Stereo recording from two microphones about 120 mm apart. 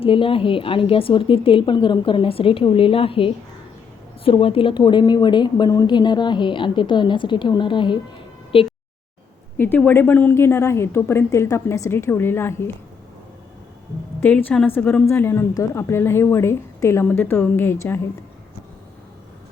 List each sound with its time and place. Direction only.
0.0 s a woman's voice: 45° left (ahead or behind)
9.6 s a woman's voice: 15° left (ahead or behind)
14.2 s a woman's voice: 15° left (ahead or behind)